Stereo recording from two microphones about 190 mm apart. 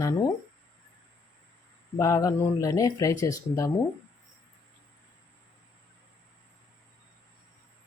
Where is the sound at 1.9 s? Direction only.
15° left (ahead or behind).